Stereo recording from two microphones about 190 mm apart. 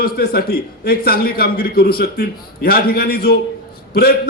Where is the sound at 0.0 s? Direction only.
55° left (ahead or behind).